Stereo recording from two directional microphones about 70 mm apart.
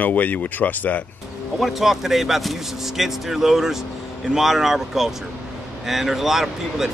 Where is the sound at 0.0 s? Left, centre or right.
Left.